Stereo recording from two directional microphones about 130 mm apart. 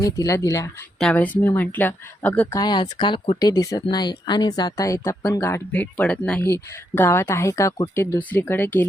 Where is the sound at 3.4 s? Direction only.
30° left (ahead or behind).